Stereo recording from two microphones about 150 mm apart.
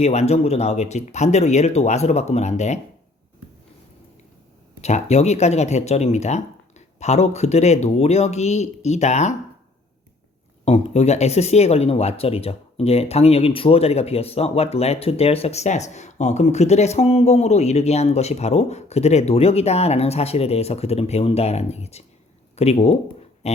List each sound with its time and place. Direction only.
0.0 s speech: 45° left (ahead or behind)
4.8 s speech: 50° left (ahead or behind)
10.7 s speech: 45° left (ahead or behind)